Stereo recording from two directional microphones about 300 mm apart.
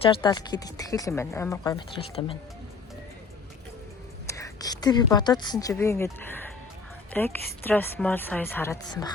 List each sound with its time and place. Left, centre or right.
0.0 s speech: centre
4.3 s a woman's voice: centre